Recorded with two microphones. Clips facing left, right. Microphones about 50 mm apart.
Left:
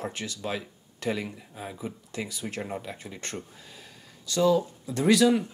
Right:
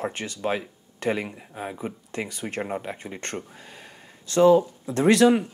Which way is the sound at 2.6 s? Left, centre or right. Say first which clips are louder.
Right 5 dB; right.